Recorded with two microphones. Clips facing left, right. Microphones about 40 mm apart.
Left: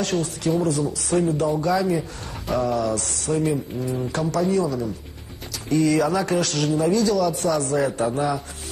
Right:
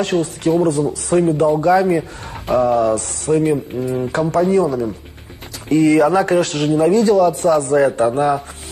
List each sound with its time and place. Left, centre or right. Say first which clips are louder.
0.0 s speech: right 6 dB; right